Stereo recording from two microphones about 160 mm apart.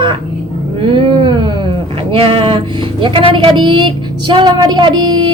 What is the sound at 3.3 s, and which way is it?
Child singing, 30° right (ahead or behind).